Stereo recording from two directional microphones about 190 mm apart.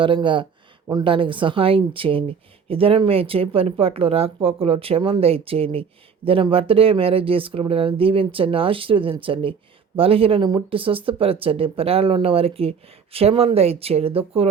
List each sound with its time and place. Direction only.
0.0 s speech: 25° right (ahead or behind)